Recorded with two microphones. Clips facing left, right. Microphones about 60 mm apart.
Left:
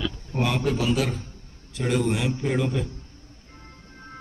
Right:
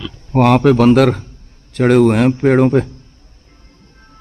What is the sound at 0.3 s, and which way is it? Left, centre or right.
A man's voice, right.